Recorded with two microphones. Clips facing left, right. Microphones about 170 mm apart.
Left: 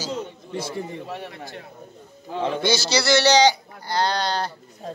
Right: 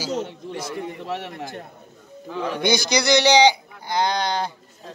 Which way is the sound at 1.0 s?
75° right (ahead or behind).